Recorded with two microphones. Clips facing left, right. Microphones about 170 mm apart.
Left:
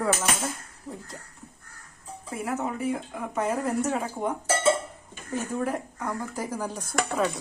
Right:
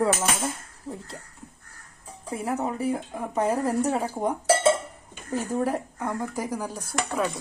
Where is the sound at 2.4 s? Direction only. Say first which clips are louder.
Right 2 dB; 35° right (ahead or behind).